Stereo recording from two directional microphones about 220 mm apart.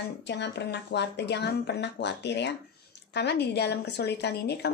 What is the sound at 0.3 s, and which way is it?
Speech, 50° left (ahead or behind).